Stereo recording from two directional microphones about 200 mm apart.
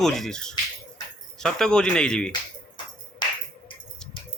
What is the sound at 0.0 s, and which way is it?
Speech, centre (ahead or behind).